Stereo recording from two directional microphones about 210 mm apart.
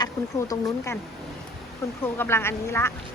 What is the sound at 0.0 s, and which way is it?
Speech, 15° left (ahead or behind).